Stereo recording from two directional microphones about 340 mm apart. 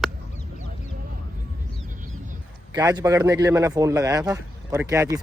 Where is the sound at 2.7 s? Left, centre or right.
Centre.